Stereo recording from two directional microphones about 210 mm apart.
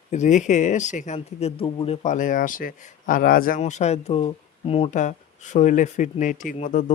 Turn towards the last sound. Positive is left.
turn(degrees=35)  # may be behind; listen again after turning